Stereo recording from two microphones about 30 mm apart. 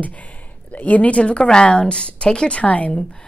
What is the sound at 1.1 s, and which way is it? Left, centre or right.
Speech, left.